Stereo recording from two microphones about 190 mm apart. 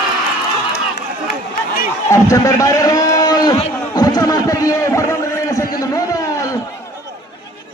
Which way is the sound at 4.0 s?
20° left (ahead or behind).